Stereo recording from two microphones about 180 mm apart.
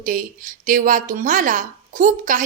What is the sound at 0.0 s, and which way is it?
A woman's voice, 50° right (ahead or behind).